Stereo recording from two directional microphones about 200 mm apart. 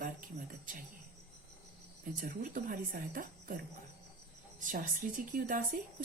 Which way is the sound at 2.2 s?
45° right (ahead or behind).